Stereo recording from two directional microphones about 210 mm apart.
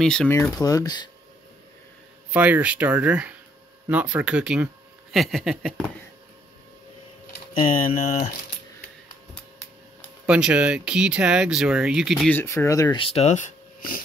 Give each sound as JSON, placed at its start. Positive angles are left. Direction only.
{"t": 0.0, "sound": "speech", "side_deg": 5}
{"t": 2.3, "sound": "speech", "side_deg": -5}
{"t": 7.8, "sound": "speech", "side_deg": 40}
{"t": 10.2, "sound": "speech", "side_deg": -5}